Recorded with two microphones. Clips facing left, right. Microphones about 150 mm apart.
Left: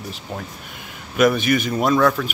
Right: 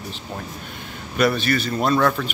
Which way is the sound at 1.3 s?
15° left (ahead or behind).